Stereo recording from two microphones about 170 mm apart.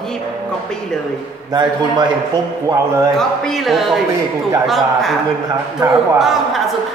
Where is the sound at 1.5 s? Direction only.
25° right (ahead or behind).